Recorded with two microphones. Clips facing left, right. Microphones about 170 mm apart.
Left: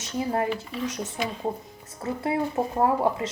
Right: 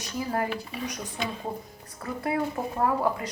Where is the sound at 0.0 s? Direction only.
25° left (ahead or behind).